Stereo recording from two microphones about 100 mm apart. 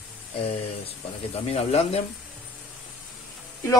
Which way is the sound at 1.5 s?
90° left.